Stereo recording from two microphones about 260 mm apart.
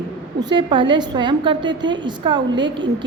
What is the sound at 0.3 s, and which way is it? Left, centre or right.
A woman's voice, centre.